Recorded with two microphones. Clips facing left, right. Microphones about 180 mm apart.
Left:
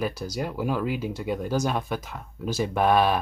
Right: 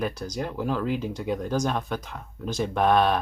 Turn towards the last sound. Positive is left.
turn(degrees=5)  # may be behind; listen again after turning